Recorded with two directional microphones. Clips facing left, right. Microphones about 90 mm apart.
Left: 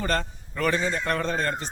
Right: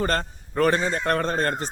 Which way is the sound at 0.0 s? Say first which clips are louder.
Right 2 dB; 45° right (ahead or behind).